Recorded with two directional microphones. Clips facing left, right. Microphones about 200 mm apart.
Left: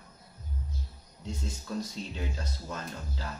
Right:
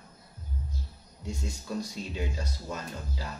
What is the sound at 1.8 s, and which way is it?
Speech, 10° right (ahead or behind).